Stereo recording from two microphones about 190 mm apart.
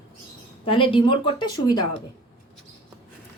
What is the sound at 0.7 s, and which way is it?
Speech, 25° left (ahead or behind).